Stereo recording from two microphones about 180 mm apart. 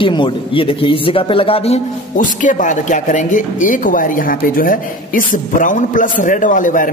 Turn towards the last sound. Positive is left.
turn(degrees=45)  # may be behind; listen again after turning